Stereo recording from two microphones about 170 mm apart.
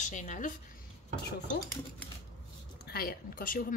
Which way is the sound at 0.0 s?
45° left (ahead or behind).